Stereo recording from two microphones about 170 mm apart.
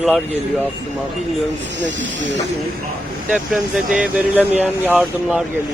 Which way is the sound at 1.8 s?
90° right.